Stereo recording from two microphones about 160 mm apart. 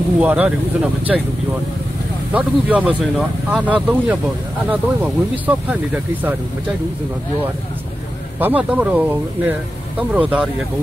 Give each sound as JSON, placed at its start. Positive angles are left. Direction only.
{"t": 0.2, "sound": "speech", "side_deg": -10}
{"t": 2.3, "sound": "speech", "side_deg": -10}
{"t": 8.4, "sound": "speech", "side_deg": -10}